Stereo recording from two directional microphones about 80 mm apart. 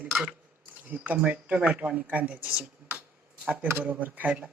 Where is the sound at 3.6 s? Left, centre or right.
Right.